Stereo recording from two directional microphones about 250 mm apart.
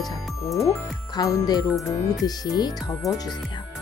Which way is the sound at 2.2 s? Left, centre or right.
Centre.